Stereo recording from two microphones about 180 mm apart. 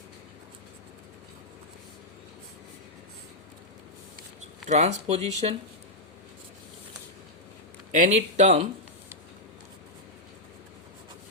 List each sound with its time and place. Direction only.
4.7 s speech: 40° right (ahead or behind)
7.9 s speech: 40° right (ahead or behind)